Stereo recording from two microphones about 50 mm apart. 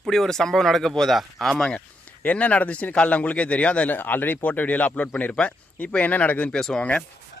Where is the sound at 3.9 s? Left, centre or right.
Left.